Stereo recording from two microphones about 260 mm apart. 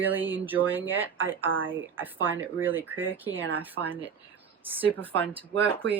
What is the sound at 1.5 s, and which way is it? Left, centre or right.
Speech, right.